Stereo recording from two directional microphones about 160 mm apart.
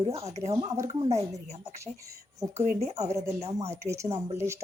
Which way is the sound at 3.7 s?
20° right (ahead or behind).